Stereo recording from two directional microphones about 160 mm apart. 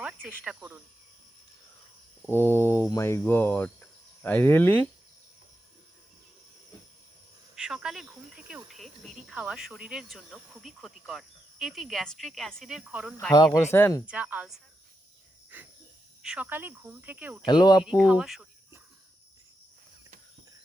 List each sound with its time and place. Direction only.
0.0 s speech: 10° right (ahead or behind)
2.2 s cricket: 15° left (ahead or behind)
7.5 s speech: 5° right (ahead or behind)
13.3 s speech: 25° left (ahead or behind)
14.1 s speech: 10° right (ahead or behind)
16.2 s speech: 5° right (ahead or behind)
17.4 s speech: 25° left (ahead or behind)
17.8 s speech: 5° right (ahead or behind)